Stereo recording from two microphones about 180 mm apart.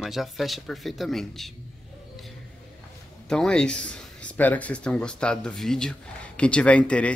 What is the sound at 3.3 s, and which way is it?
Speech, 5° left (ahead or behind).